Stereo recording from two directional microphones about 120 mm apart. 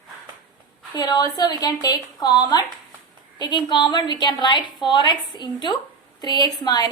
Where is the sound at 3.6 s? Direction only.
40° left (ahead or behind).